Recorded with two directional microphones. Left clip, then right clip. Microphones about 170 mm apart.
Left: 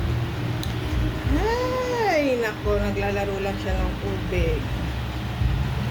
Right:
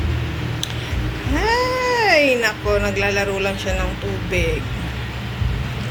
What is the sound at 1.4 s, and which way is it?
Cat, 5° right (ahead or behind).